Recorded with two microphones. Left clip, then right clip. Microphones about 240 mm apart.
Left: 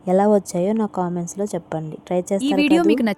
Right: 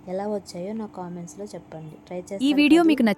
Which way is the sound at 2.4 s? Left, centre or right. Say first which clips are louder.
Right 1 dB; centre.